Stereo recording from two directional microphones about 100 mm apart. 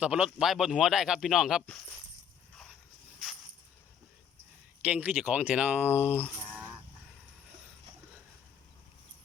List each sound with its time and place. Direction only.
0.0 s speech: 10° right (ahead or behind)
4.8 s speech: 15° right (ahead or behind)
6.1 s a sound: 15° left (ahead or behind)